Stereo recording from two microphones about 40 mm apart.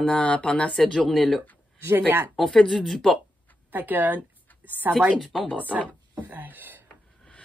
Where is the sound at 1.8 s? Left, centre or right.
Right.